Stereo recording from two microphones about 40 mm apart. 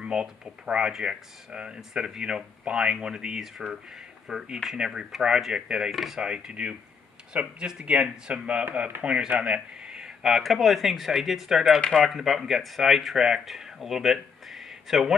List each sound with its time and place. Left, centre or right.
0.0 s speech: right
5.9 s speech: centre
6.2 s speech: right
9.4 s a sound: right
10.2 s speech: centre